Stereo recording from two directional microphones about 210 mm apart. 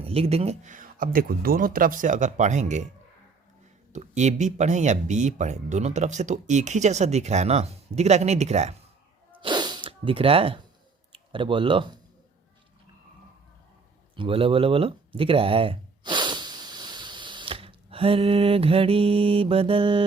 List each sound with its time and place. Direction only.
0.0 s speech: 30° right (ahead or behind)
3.9 s speech: 35° right (ahead or behind)
9.4 s sneeze: 20° right (ahead or behind)
11.1 s speech: 25° right (ahead or behind)
14.2 s speech: 25° right (ahead or behind)